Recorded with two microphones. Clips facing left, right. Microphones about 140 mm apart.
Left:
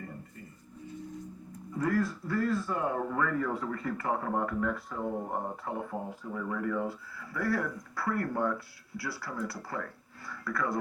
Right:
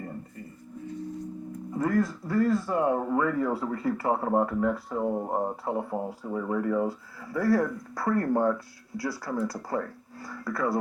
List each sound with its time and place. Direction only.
1.9 s speech: 40° right (ahead or behind)